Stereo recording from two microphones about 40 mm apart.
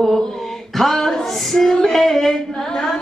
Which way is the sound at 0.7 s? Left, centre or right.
Centre.